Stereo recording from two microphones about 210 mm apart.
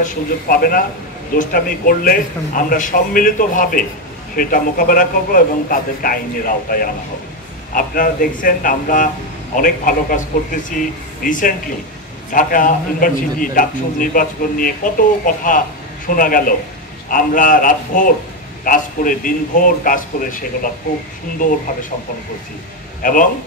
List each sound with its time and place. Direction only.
0.0 s a man's voice: 40° left (ahead or behind)
23.0 s a man's voice: 40° left (ahead or behind)